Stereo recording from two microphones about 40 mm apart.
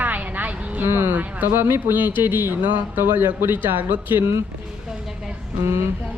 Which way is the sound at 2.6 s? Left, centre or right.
Right.